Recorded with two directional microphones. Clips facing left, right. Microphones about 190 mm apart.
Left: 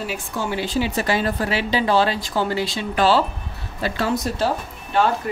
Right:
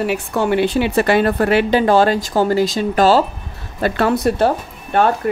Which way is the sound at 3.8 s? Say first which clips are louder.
Right 6 dB; 55° right (ahead or behind).